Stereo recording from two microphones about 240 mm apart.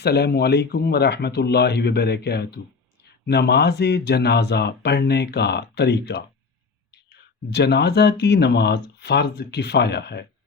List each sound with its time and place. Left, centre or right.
0.0 s speech: left
7.5 s speech: left